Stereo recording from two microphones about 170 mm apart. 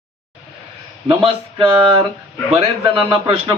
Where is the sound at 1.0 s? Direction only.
30° right (ahead or behind).